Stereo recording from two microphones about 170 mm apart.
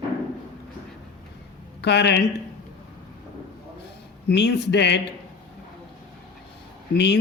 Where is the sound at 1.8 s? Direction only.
90° left.